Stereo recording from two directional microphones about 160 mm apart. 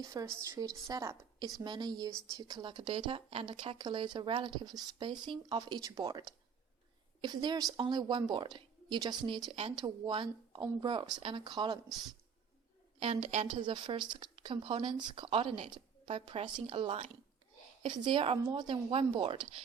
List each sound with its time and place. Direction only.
0.0 s a woman's voice: 20° right (ahead or behind)
13.0 s speech: 40° right (ahead or behind)
13.6 s a woman's voice: 30° right (ahead or behind)